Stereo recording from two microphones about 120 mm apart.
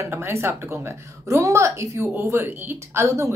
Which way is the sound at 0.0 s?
20° right (ahead or behind).